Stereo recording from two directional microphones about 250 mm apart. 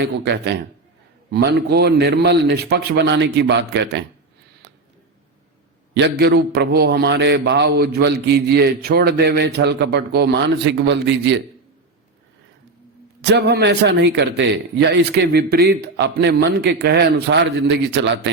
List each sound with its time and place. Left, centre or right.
0.0 s a man's voice: right
5.9 s a man's voice: right
13.2 s a man's voice: right